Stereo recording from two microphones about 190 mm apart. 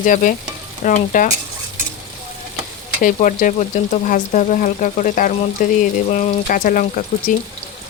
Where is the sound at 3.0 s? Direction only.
45° left (ahead or behind).